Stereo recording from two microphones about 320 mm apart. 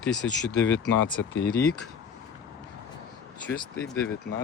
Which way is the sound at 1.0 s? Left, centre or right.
Left.